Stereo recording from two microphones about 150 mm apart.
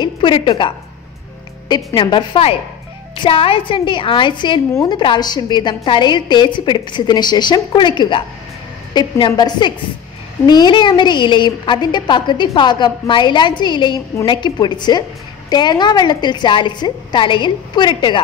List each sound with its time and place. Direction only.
0.0 s music: 35° left (ahead or behind)
2.0 s a woman's voice: 30° left (ahead or behind)